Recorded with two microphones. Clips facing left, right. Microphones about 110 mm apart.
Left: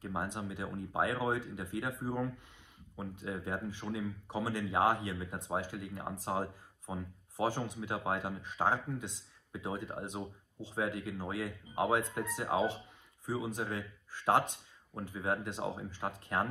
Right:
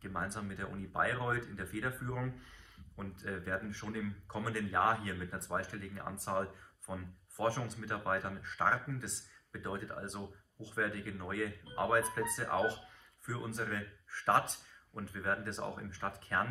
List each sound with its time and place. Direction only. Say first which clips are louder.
0.0 s speech: left 2 dB; 15° left (ahead or behind)